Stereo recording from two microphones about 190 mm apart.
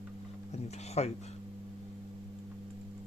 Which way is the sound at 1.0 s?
35° left (ahead or behind).